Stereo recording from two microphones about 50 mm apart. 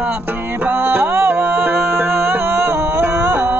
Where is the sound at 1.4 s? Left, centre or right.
Right.